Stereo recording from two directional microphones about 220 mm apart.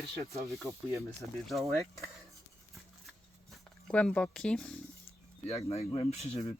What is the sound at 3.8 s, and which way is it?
Speech, 5° left (ahead or behind).